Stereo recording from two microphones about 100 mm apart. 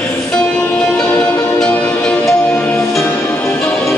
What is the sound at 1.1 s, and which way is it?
Music, 25° left (ahead or behind).